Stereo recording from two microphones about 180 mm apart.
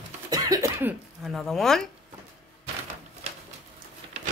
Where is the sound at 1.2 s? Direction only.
Centre (ahead or behind).